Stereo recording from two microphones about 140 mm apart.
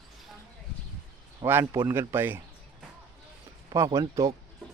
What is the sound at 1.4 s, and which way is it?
Speech, 15° right (ahead or behind).